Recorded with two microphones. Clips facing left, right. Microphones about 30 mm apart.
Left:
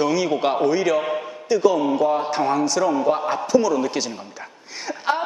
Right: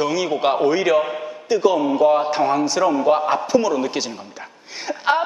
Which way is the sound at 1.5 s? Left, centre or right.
Centre.